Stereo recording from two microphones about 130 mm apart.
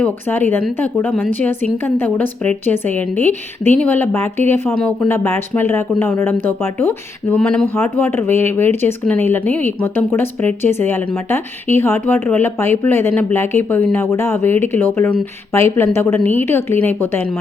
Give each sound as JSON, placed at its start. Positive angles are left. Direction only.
{"t": 0.0, "sound": "a woman's voice", "side_deg": 15}